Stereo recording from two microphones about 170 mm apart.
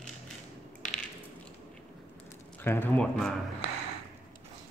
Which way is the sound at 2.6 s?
10° left (ahead or behind).